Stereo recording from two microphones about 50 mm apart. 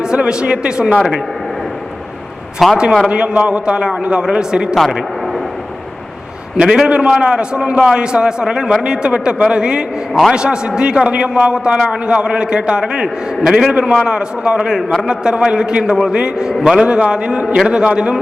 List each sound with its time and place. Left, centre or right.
0.0 s a man's voice: centre
2.6 s a man's voice: centre
3.1 s a man's voice: right
4.7 s a man's voice: centre
6.6 s a man's voice: centre
16.8 s a man's voice: centre